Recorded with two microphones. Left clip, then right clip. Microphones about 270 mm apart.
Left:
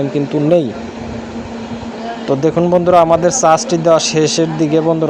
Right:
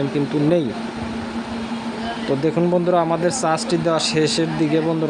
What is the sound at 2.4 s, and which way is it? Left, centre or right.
Speech, centre.